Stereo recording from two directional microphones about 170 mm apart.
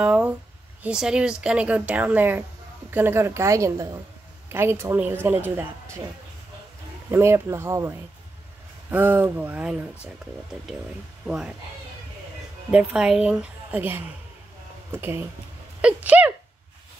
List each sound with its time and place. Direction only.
0.0 s a woman's voice: 5° right (ahead or behind)
7.1 s a woman's voice: 15° right (ahead or behind)
8.9 s a woman's voice: 10° right (ahead or behind)
11.2 s speech: 5° right (ahead or behind)
12.7 s a woman's voice: 5° right (ahead or behind)